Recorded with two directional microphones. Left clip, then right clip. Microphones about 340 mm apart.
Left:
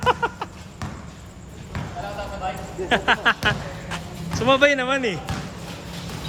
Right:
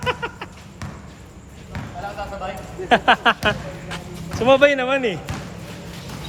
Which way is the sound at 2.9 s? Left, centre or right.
Centre.